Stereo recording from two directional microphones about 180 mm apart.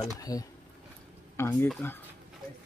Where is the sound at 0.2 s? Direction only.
20° left (ahead or behind).